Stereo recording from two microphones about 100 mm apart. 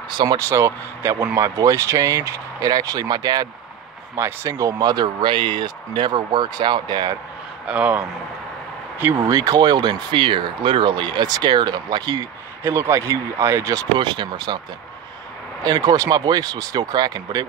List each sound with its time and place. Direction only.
0.1 s speech: 45° right (ahead or behind)
0.4 s speech: 30° right (ahead or behind)
4.2 s speech: 30° right (ahead or behind); by 7.2 s 50° right (ahead or behind)
7.6 s speech: 10° right (ahead or behind)
9.3 s speech: 40° right (ahead or behind)
12.6 s speech: 25° right (ahead or behind)
13.9 s speech: 50° right (ahead or behind)
15.6 s speech: 40° right (ahead or behind)